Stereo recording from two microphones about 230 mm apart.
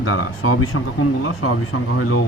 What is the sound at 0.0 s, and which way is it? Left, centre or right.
Speech, left.